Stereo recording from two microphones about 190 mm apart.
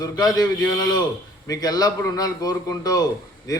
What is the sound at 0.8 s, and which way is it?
Speech, 20° left (ahead or behind).